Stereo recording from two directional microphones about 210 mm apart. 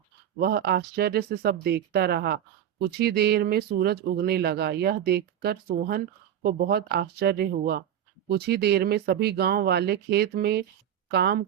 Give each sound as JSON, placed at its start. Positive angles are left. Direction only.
{"t": 0.3, "sound": "speech", "side_deg": -50}